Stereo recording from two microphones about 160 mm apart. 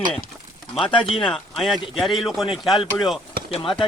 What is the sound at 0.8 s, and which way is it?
Speech, 30° left (ahead or behind).